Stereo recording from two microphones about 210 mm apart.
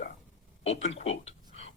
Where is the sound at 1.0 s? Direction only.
30° left (ahead or behind).